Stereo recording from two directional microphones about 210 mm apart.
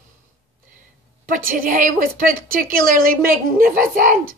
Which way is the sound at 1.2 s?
40° right (ahead or behind).